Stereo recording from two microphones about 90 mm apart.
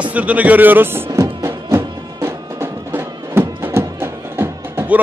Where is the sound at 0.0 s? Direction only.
15° right (ahead or behind).